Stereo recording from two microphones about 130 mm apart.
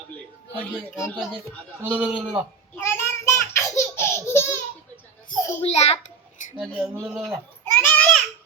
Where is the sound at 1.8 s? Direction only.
10° right (ahead or behind).